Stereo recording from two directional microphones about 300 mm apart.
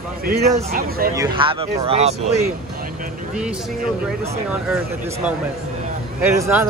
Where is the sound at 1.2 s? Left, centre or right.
Centre.